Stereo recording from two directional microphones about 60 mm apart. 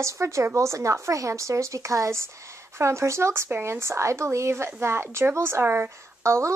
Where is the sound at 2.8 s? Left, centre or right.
Right.